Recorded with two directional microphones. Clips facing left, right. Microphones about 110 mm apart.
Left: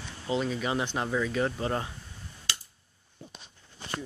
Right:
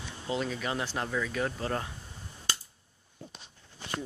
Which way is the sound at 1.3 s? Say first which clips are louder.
Left 3 dB; 5° left (ahead or behind).